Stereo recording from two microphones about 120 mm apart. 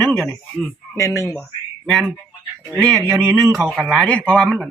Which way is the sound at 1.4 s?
5° left (ahead or behind).